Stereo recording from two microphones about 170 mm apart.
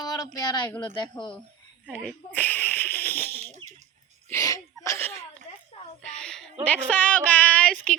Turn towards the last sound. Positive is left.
turn(degrees=10)  # may be behind; listen again after turning